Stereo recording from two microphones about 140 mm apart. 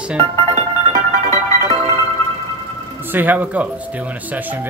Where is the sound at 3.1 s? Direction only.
15° right (ahead or behind).